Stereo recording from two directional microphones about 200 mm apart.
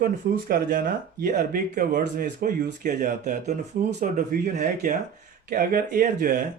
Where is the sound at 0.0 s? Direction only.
45° right (ahead or behind).